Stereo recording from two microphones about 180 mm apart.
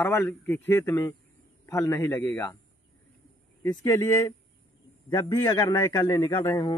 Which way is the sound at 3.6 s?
20° left (ahead or behind).